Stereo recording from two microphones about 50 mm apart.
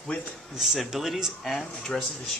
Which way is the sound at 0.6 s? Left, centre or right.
Centre.